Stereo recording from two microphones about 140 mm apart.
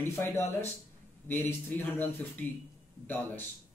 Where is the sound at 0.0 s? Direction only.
15° left (ahead or behind).